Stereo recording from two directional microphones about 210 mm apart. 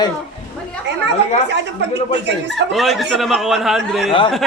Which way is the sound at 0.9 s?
55° right (ahead or behind).